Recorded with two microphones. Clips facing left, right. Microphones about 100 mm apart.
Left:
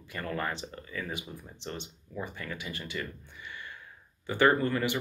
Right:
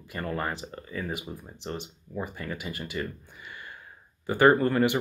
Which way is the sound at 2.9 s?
40° right (ahead or behind).